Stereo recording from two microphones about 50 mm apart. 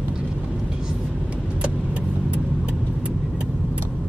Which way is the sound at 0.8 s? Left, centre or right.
Right.